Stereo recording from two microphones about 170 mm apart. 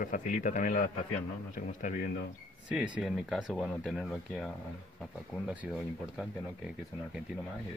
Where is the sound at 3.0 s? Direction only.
Centre (ahead or behind).